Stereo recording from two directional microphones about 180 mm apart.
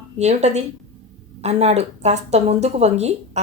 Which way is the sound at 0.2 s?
40° right (ahead or behind).